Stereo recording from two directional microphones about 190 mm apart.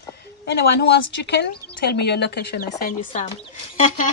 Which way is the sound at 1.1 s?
60° left (ahead or behind).